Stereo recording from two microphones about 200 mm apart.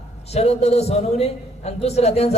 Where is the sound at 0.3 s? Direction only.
30° left (ahead or behind).